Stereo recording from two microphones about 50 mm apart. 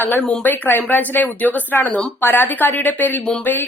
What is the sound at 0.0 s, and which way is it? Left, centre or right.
Speech, left.